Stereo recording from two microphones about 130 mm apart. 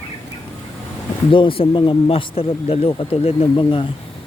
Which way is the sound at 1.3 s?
40° left (ahead or behind).